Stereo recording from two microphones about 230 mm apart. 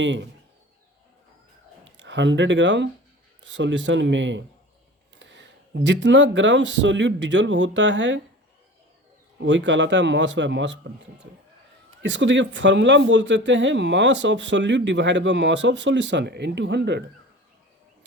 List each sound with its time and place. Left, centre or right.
0.0 s speech: right
2.0 s speech: right
9.4 s speech: right
12.0 s speech: right